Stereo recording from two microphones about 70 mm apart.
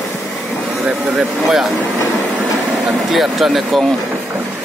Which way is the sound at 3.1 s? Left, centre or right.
Centre.